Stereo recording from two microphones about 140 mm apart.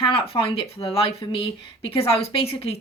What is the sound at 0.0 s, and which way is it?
A woman's voice, 40° left (ahead or behind).